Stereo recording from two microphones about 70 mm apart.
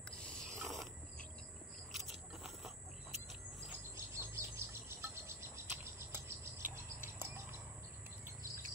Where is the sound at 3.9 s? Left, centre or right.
Right.